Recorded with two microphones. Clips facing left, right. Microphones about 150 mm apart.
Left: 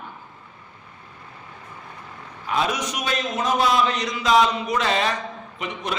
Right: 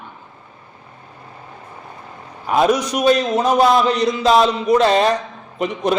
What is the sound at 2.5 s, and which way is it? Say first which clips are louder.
Speech: right 8 dB; 45° right (ahead or behind).